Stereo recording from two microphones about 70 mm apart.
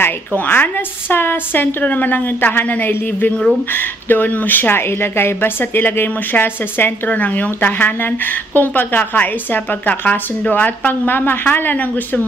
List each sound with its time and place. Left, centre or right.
0.5 s a woman's voice: left